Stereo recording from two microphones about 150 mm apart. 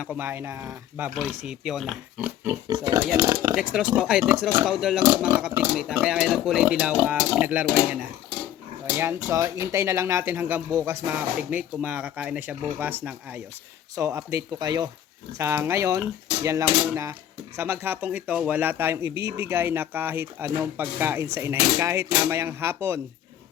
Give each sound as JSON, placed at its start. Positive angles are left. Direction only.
{"t": 0.0, "sound": "speech", "side_deg": -10}
{"t": 2.1, "sound": "pig", "side_deg": -10}
{"t": 2.6, "sound": "speech", "side_deg": -25}
{"t": 3.5, "sound": "speech", "side_deg": -5}
{"t": 9.3, "sound": "speech", "side_deg": -20}